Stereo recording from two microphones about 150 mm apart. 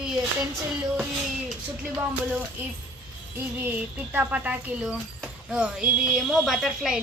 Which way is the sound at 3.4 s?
15° right (ahead or behind).